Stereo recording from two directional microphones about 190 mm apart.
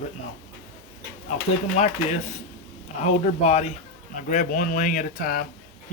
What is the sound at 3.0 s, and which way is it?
Speech, 35° left (ahead or behind).